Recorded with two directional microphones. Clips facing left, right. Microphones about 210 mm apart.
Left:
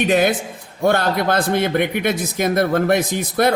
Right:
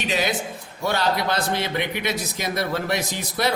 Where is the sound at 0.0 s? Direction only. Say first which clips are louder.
Left 8 dB; 55° left (ahead or behind).